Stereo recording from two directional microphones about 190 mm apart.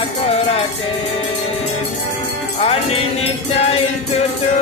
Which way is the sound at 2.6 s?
30° left (ahead or behind).